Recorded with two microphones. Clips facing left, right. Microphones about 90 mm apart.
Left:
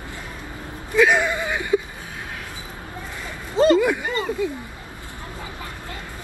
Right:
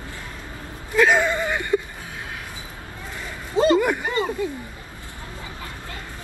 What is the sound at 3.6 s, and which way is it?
Speech, 5° right (ahead or behind).